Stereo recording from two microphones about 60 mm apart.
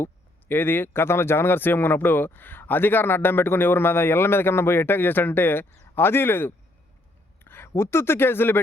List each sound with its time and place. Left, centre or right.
0.0 s speech: left